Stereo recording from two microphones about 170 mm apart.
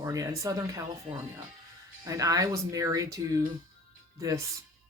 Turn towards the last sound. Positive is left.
turn(degrees=-20)  # may be behind; listen again after turning